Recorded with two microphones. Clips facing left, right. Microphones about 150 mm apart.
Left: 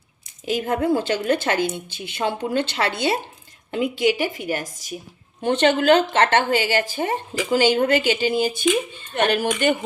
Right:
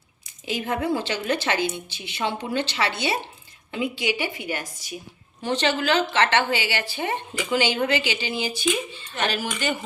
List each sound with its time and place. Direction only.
0.4 s a woman's voice: 45° left (ahead or behind)
5.4 s a woman's voice: 55° left (ahead or behind)